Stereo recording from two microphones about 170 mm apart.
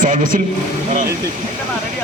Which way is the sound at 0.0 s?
50° right (ahead or behind).